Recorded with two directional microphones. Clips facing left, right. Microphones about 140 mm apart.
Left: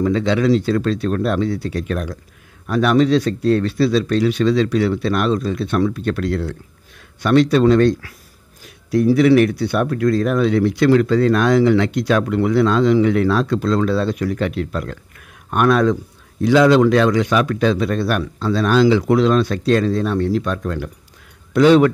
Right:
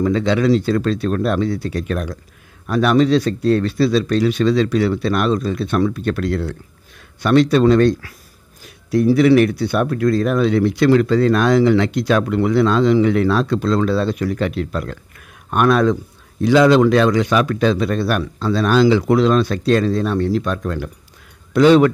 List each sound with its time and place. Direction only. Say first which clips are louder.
0.0 s speech: even; 45° right (ahead or behind)